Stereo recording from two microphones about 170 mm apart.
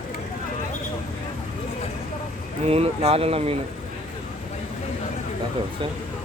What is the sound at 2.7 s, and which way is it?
Speech, 35° right (ahead or behind).